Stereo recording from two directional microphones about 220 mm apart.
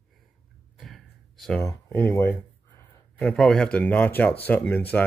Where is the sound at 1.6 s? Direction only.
10° left (ahead or behind).